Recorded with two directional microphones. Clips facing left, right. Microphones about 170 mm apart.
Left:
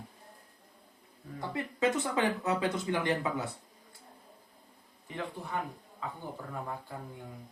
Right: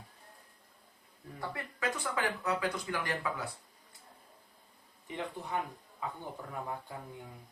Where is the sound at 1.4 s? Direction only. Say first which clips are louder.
Left 7 dB; 20° left (ahead or behind).